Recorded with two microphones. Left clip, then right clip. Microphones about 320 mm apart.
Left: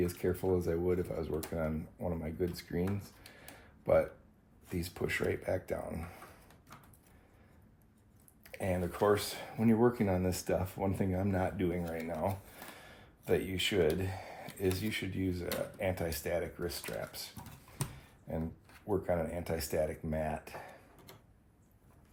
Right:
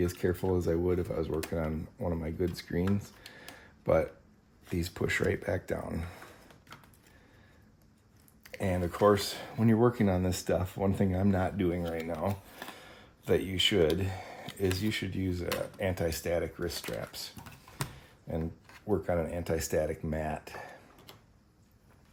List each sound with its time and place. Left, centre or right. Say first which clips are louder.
0.0 s speech: right 3 dB; right
8.4 s speech: right 3 dB; right
12.7 s a sound: right 3 dB; right
14.8 s speech: right 3 dB; right
17.3 s a sound: right 5 dB; centre
18.9 s speech: right 3 dB; right